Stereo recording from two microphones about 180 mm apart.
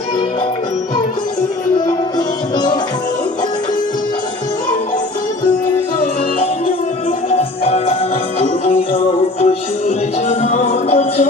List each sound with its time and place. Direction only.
1.9 s music: 25° left (ahead or behind)
7.3 s music: 35° left (ahead or behind)